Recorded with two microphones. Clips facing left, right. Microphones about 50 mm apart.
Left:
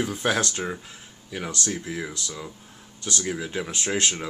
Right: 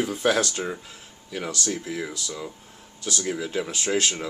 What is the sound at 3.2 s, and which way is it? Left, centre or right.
Speech, centre.